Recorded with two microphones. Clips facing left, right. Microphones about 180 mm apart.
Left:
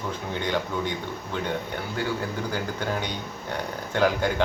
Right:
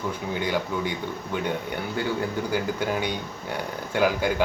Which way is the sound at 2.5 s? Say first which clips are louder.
Right 3 dB; 10° right (ahead or behind).